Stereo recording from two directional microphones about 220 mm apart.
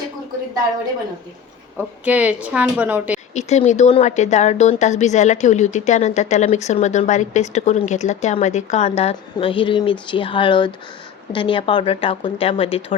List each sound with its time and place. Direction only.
2.0 s a woman's voice: 5° right (ahead or behind)
3.3 s speech: 30° left (ahead or behind)